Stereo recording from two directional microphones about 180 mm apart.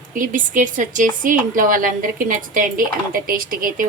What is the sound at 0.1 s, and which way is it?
A woman's voice, 45° right (ahead or behind).